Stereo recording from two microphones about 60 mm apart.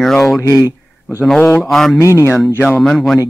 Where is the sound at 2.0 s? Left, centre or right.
Left.